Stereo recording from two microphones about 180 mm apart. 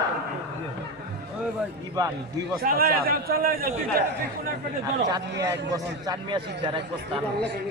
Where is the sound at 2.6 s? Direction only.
55° right (ahead or behind).